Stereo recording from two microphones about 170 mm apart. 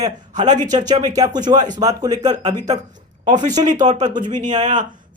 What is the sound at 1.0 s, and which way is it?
Speech, 25° right (ahead or behind).